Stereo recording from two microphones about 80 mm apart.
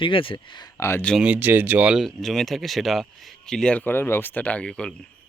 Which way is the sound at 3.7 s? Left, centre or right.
Left.